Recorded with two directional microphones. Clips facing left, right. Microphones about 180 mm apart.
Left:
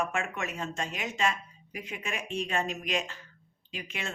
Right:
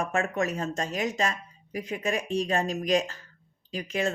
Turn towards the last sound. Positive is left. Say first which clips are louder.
# right 10 dB
turn(degrees=-40)  # may be behind; listen again after turning